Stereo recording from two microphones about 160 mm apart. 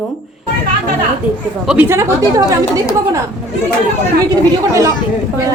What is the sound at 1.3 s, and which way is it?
Speech, 10° right (ahead or behind).